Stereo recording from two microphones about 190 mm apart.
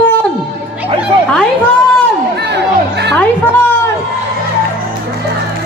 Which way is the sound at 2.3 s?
60° right (ahead or behind).